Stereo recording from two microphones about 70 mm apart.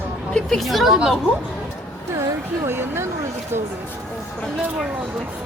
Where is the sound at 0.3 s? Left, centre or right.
Centre.